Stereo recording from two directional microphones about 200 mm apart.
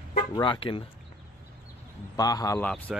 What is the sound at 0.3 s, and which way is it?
Speech, 25° left (ahead or behind).